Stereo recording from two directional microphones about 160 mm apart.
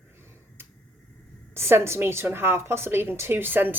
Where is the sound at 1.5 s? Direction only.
15° right (ahead or behind).